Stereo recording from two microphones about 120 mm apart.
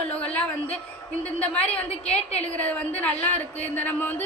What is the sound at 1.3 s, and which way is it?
Speech, 10° left (ahead or behind).